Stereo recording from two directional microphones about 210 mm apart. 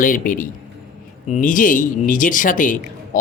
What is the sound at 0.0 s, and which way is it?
Speech, 40° left (ahead or behind).